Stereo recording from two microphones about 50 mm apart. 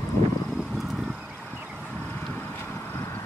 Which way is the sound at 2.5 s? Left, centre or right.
Left.